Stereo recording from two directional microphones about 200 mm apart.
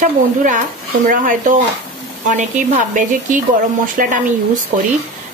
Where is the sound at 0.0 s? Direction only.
40° right (ahead or behind).